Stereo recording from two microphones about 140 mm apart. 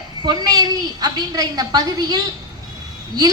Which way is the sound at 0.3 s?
30° right (ahead or behind).